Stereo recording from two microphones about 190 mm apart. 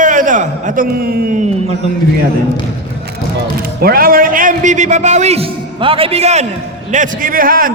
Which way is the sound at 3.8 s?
50° right (ahead or behind).